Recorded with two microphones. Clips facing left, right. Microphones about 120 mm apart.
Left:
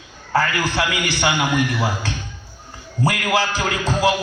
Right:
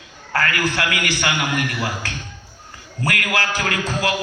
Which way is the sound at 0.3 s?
25° left (ahead or behind).